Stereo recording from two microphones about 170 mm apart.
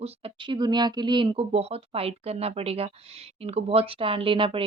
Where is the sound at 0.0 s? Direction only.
35° right (ahead or behind).